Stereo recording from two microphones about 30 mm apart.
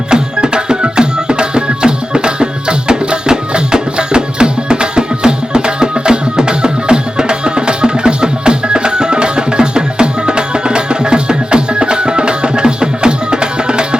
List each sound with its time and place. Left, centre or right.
0.1 s music: right